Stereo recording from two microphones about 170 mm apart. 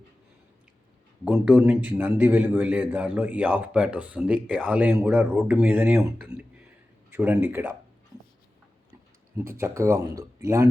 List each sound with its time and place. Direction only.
1.2 s a man's voice: 10° right (ahead or behind)
9.4 s a man's voice: 15° right (ahead or behind)